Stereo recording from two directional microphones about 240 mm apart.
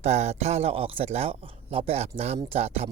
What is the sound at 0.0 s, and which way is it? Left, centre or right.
Speech, right.